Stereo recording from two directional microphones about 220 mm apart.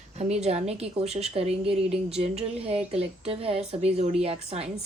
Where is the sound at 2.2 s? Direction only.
25° right (ahead or behind).